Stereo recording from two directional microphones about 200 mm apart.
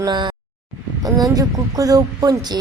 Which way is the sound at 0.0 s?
20° right (ahead or behind).